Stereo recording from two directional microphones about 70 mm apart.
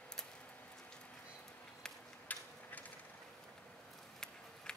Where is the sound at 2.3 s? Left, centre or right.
Left.